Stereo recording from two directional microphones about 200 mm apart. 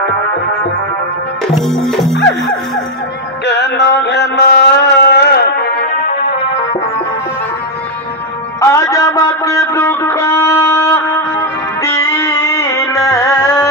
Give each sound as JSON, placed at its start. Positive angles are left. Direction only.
{"t": 1.5, "sound": "music", "side_deg": 0}
{"t": 3.4, "sound": "music", "side_deg": 60}
{"t": 6.0, "sound": "music", "side_deg": 35}
{"t": 8.5, "sound": "music", "side_deg": 15}